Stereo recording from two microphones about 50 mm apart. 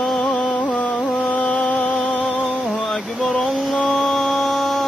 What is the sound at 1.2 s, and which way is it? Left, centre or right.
Music, centre.